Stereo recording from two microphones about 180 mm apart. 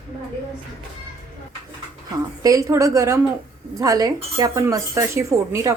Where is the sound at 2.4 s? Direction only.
20° right (ahead or behind).